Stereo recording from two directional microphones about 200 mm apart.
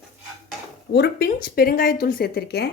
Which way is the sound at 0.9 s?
55° left (ahead or behind).